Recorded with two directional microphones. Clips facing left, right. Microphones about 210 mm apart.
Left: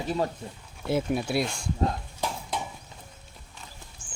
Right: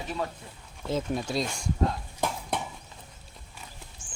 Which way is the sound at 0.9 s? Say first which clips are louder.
Left 3 dB; 10° left (ahead or behind).